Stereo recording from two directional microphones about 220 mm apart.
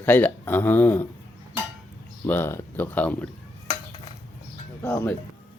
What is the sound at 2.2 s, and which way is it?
Speech, 10° left (ahead or behind).